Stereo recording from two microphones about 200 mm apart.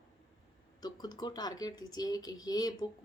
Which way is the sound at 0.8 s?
20° left (ahead or behind).